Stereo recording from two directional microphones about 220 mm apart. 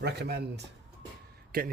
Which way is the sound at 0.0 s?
50° right (ahead or behind).